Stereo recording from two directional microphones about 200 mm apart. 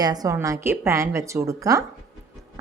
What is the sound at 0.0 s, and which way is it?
A woman's voice, 20° right (ahead or behind).